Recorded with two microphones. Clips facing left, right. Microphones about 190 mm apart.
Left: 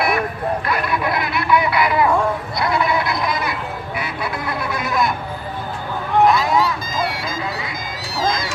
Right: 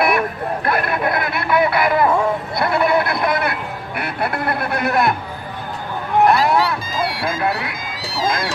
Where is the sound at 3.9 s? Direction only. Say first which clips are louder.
Right 5 dB; 60° right (ahead or behind).